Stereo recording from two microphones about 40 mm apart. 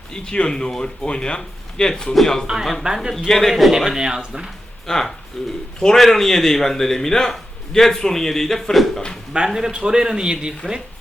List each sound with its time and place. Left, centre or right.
0.1 s a man's voice: centre
2.8 s a man's voice: centre
3.2 s a man's voice: centre
3.5 s a man's voice: centre
3.9 s a man's voice: centre
4.9 s a man's voice: centre
9.5 s a man's voice: centre
9.7 s a man's voice: centre